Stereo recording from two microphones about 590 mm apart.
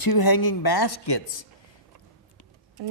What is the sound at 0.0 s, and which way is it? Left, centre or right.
Speech, left.